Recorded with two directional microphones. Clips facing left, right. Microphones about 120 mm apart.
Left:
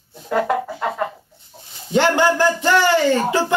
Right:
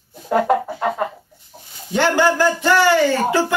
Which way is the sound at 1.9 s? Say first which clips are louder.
Even; 20° left (ahead or behind).